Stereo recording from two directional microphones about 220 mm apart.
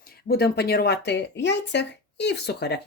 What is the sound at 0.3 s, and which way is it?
Speech, 45° left (ahead or behind).